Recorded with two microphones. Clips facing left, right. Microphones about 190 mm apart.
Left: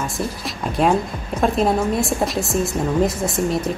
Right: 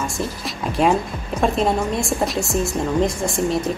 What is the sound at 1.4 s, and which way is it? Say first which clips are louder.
A woman's voice: left 1 dB; centre (ahead or behind).